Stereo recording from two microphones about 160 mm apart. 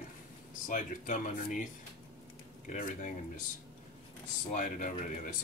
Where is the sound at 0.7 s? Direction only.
55° left (ahead or behind).